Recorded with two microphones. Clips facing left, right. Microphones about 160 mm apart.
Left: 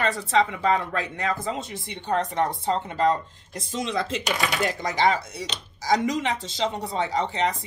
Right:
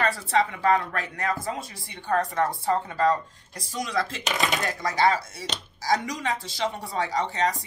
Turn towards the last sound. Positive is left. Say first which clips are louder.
# left 1 dB
turn(degrees=20)  # may be behind; listen again after turning